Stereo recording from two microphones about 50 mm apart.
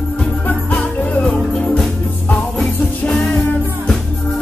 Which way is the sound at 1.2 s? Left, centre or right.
Centre.